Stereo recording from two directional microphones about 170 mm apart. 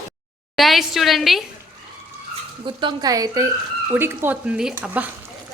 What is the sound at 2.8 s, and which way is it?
Speech, 20° right (ahead or behind).